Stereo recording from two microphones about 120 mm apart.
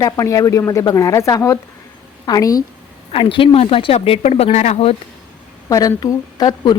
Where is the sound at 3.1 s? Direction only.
45° left (ahead or behind).